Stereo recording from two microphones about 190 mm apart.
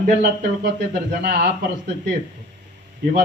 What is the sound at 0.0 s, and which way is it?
Speech, 60° right (ahead or behind).